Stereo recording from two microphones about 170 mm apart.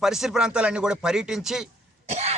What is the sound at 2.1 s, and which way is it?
Cough, 40° right (ahead or behind).